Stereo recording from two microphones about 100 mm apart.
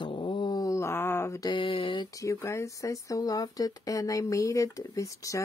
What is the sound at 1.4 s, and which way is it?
Speech, 50° left (ahead or behind).